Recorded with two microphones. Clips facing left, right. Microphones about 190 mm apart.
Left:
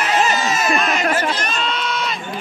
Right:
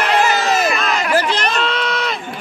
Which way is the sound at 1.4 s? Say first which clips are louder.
Right 4 dB; 65° right (ahead or behind).